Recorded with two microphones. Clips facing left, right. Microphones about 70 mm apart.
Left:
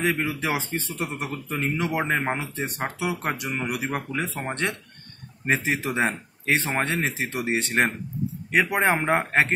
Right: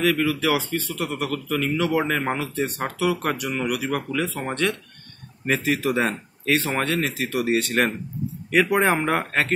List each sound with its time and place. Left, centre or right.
0.0 s a man's voice: left
8.6 s speech: centre
8.9 s speech: left